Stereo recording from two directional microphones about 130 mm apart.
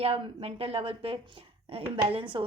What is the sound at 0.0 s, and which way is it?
A woman's voice, 50° right (ahead or behind).